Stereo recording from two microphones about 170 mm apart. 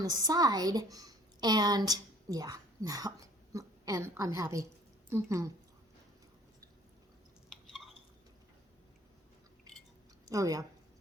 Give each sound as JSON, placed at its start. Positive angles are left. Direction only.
{"t": 0.0, "sound": "a child's voice", "side_deg": -25}
{"t": 10.2, "sound": "a woman's voice", "side_deg": -20}